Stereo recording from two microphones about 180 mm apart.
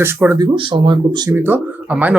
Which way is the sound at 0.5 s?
30° right (ahead or behind).